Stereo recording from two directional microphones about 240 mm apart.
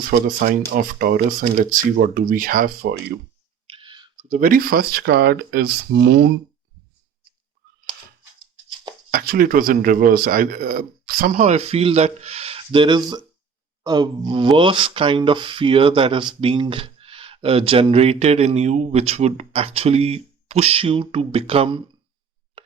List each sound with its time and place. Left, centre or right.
0.1 s speech: right
3.7 s clicking: right
4.3 s speech: right
9.1 s speech: right